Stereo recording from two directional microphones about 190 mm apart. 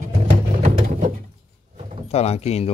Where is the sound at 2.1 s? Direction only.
35° left (ahead or behind).